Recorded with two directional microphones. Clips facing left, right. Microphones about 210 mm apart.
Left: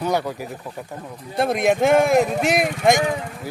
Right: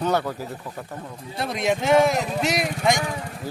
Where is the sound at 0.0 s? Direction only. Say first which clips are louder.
Left 1 dB; 10° left (ahead or behind).